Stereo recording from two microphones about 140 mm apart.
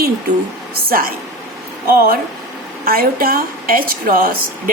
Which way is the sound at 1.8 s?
90° right.